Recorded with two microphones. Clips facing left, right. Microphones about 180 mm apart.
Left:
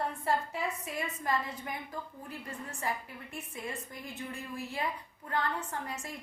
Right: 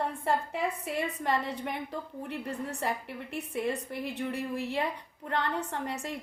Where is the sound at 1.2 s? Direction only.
65° right (ahead or behind).